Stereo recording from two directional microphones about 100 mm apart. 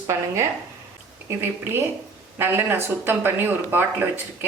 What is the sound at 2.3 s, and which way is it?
Speech, 20° right (ahead or behind).